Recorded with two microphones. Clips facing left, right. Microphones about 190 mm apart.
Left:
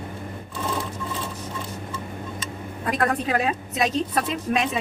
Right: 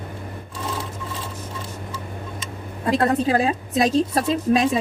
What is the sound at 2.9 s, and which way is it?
A woman's voice, 25° right (ahead or behind).